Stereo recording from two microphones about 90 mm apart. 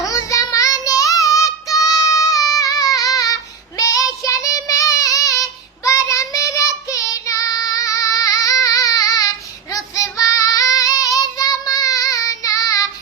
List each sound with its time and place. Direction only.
0.0 s child singing: 40° left (ahead or behind)